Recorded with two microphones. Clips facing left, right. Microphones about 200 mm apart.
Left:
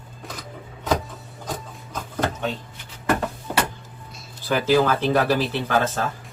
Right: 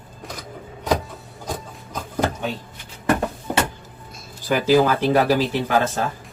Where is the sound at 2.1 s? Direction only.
10° right (ahead or behind).